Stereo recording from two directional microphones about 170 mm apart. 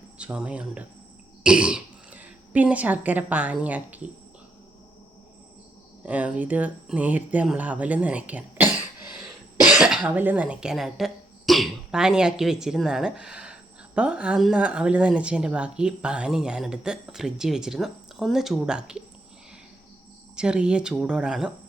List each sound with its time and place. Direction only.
0.2 s speech: 5° right (ahead or behind)
6.0 s speech: 10° right (ahead or behind)
20.3 s speech: 5° right (ahead or behind)